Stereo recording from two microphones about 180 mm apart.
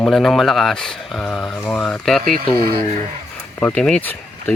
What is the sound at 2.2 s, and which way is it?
Speech, 50° right (ahead or behind).